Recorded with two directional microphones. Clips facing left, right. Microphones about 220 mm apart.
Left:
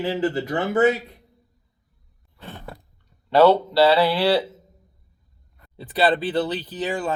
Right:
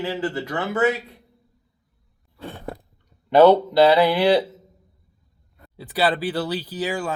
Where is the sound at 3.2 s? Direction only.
15° right (ahead or behind).